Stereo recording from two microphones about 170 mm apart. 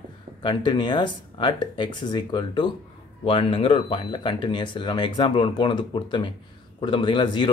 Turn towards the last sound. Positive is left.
turn(degrees=30)  # may be behind; listen again after turning